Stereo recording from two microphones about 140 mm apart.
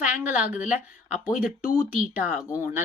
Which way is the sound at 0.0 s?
10° right (ahead or behind).